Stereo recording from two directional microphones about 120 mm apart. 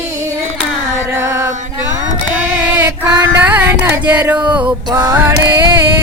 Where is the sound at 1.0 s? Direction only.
20° right (ahead or behind).